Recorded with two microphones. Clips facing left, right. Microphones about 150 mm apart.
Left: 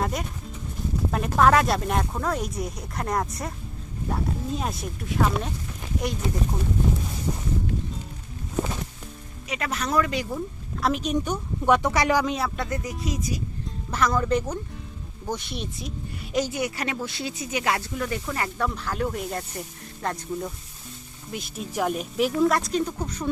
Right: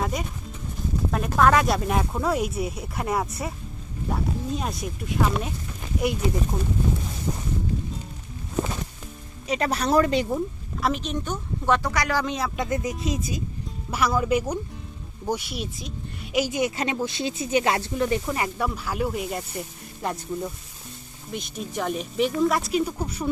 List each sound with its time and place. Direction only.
0.0 s speech: centre (ahead or behind)
9.5 s speech: 35° right (ahead or behind)
10.8 s speech: centre (ahead or behind); by 12.2 s 20° left (ahead or behind)
12.2 s speech: centre (ahead or behind)
12.5 s speech: 20° right (ahead or behind)
13.9 s speech: 10° right (ahead or behind)
16.4 s speech: 20° right (ahead or behind)
21.3 s speech: 5° left (ahead or behind)